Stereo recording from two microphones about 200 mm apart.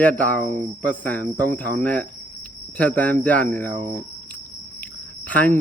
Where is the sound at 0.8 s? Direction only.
5° left (ahead or behind).